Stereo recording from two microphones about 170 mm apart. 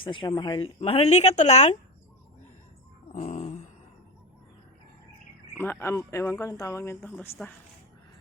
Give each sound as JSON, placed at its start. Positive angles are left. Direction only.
{"t": 0.0, "sound": "speech", "side_deg": 30}
{"t": 3.1, "sound": "a sound", "side_deg": 45}
{"t": 5.5, "sound": "speech", "side_deg": 15}